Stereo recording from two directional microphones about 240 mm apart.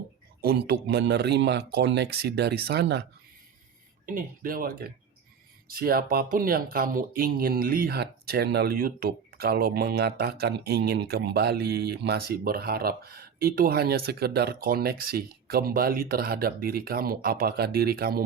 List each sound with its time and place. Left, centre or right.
0.4 s a man's voice: right
4.0 s speech: right